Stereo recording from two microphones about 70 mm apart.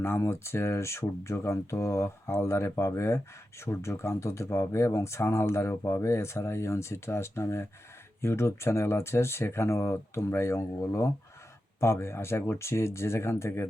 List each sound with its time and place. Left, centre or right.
0.0 s speech: left